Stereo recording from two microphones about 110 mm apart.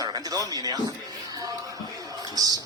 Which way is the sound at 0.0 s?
35° right (ahead or behind).